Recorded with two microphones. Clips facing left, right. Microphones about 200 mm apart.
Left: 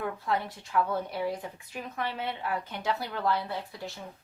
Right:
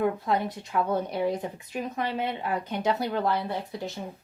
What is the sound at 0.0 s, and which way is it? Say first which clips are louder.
Speech: right 5 dB; 20° right (ahead or behind).